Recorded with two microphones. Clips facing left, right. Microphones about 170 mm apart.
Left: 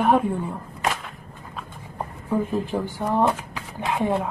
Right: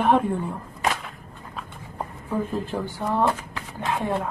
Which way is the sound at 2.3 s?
15° left (ahead or behind).